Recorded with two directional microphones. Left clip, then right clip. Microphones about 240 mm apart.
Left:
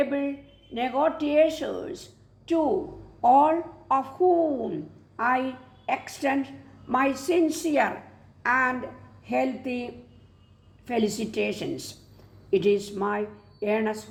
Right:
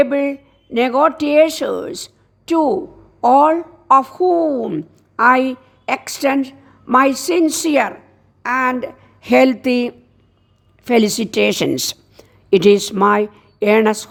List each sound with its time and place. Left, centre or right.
0.0 s a woman's voice: right
8.4 s a woman's voice: right